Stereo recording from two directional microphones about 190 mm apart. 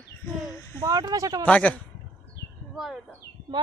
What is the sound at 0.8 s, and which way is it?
Speech, 20° right (ahead or behind).